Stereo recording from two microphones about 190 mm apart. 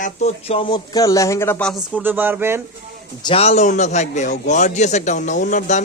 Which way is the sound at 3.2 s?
30° left (ahead or behind).